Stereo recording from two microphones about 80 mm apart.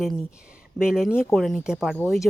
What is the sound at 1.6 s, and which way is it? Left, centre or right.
Speech, centre.